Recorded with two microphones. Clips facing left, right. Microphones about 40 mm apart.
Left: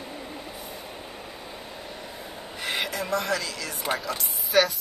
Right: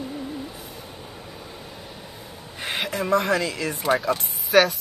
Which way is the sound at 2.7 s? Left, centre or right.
Right.